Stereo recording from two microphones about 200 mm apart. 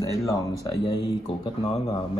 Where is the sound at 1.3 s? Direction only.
25° left (ahead or behind).